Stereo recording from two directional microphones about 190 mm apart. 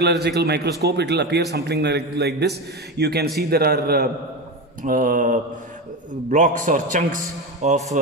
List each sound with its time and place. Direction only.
0.0 s a man's voice: 60° right (ahead or behind)
4.8 s mantra: 45° right (ahead or behind)
6.3 s a man's voice: 40° right (ahead or behind)